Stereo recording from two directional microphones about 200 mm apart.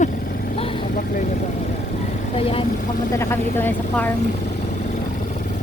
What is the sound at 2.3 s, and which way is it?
Speech, 30° left (ahead or behind).